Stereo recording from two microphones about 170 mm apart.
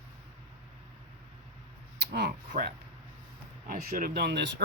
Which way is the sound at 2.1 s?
70° right (ahead or behind).